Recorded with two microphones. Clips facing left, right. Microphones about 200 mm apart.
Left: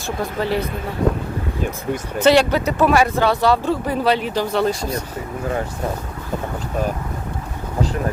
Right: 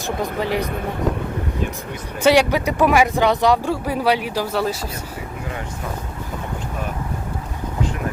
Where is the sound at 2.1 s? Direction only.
10° right (ahead or behind).